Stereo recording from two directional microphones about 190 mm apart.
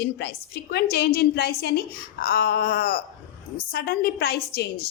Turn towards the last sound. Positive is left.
turn(degrees=55)  # may be behind; listen again after turning